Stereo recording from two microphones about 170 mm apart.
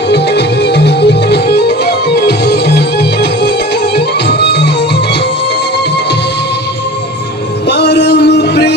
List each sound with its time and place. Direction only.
0.1 s music: 75° left (ahead or behind)
7.6 s music: 70° left (ahead or behind)